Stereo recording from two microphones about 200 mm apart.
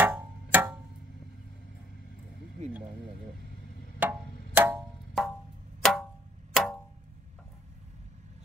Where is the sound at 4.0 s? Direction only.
10° right (ahead or behind).